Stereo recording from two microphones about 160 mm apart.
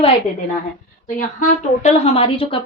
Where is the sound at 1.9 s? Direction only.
40° left (ahead or behind).